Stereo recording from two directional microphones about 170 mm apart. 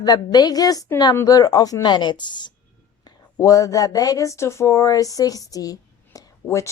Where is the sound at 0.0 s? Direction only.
25° left (ahead or behind).